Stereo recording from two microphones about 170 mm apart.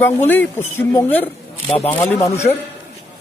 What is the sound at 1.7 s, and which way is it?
Speech, 35° left (ahead or behind).